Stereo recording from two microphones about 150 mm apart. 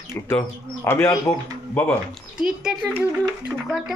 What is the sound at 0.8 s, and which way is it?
Speech, 15° left (ahead or behind).